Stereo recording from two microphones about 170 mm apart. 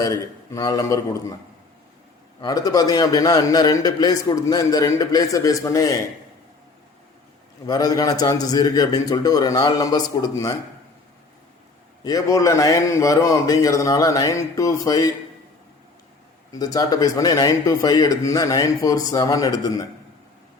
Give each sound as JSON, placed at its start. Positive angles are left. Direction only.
{"t": 0.0, "sound": "speech", "side_deg": 20}
{"t": 2.4, "sound": "speech", "side_deg": 20}
{"t": 7.7, "sound": "speech", "side_deg": 20}
{"t": 12.0, "sound": "speech", "side_deg": 20}
{"t": 16.5, "sound": "speech", "side_deg": 20}